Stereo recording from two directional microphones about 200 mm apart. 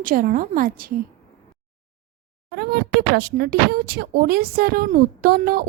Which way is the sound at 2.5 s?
50° right (ahead or behind).